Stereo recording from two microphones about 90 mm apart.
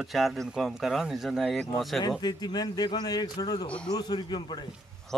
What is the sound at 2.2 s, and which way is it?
A man's voice, 50° left (ahead or behind).